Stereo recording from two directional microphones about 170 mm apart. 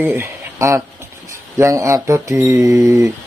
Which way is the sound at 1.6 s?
20° right (ahead or behind).